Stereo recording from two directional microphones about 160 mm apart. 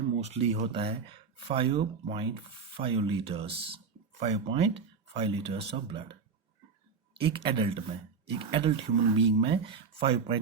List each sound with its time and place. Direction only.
0.2 s speech: 40° right (ahead or behind)
7.5 s speech: 35° right (ahead or behind)